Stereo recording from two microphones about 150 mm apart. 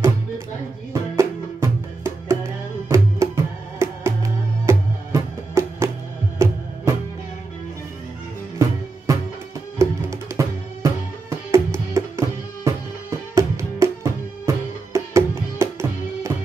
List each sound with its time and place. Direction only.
1.1 s music: 20° right (ahead or behind)
8.5 s music: 20° right (ahead or behind)